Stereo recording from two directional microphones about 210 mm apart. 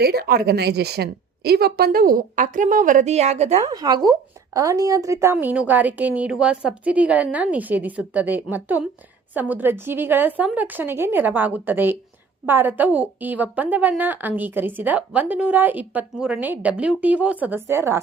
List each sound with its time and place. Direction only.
0.0 s a woman's voice: 50° right (ahead or behind); by 3.6 s 30° right (ahead or behind)
3.7 s a woman's voice: 20° right (ahead or behind)